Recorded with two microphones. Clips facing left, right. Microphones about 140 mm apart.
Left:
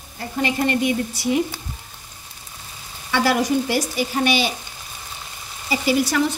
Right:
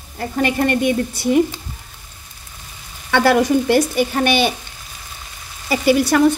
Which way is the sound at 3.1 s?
55° right (ahead or behind).